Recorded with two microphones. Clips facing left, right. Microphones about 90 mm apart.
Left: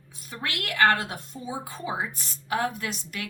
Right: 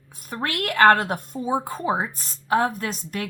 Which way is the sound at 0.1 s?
45° right (ahead or behind).